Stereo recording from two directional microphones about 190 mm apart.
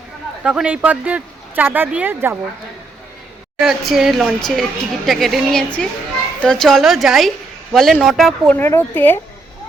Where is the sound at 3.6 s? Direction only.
Centre (ahead or behind).